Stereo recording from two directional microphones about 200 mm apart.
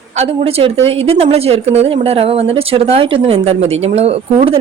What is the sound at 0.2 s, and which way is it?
A woman's voice, 30° right (ahead or behind).